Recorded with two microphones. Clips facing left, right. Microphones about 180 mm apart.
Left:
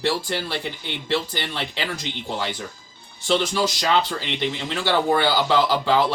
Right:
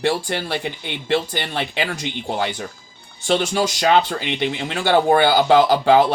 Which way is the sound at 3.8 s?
55° right (ahead or behind).